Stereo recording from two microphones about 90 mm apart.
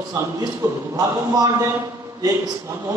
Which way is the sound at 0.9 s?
45° right (ahead or behind).